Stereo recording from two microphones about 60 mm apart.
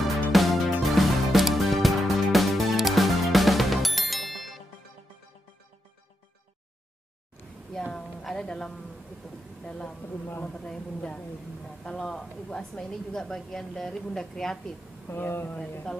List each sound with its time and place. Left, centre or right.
0.3 s music: centre
7.7 s a sound: centre
10.4 s a woman's voice: centre
15.0 s speech: left
15.9 s speech: centre